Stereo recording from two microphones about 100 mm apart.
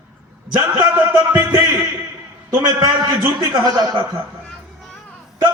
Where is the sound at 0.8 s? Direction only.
25° right (ahead or behind).